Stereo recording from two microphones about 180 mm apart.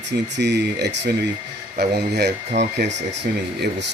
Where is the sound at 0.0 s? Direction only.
75° right (ahead or behind).